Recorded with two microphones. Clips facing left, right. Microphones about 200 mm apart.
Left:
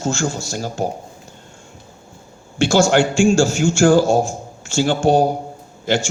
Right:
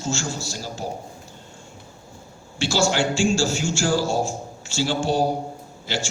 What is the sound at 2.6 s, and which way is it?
A man's voice, 50° left (ahead or behind).